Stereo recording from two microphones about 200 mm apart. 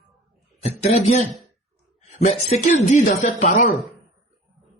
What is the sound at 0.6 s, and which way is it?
Speech, 30° left (ahead or behind).